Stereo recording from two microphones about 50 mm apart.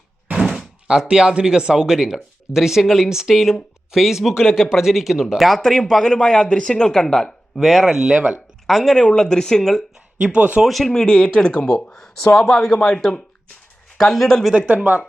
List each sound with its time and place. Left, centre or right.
0.9 s speech: centre
8.0 s speech: right
8.6 s speech: centre
10.2 s speech: right
10.6 s speech: centre
11.0 s speech: centre